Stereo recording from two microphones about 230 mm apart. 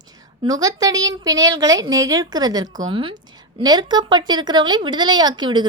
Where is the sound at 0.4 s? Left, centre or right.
Centre.